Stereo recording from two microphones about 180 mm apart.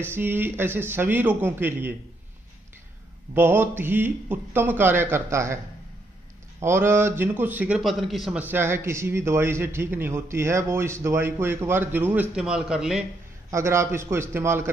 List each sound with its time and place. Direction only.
0.0 s a man's voice: 10° right (ahead or behind)
3.3 s a man's voice: 10° right (ahead or behind)
6.6 s a man's voice: 15° right (ahead or behind)
13.5 s a man's voice: 15° right (ahead or behind)